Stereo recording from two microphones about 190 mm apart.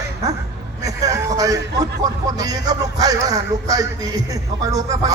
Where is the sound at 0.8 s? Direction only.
15° right (ahead or behind).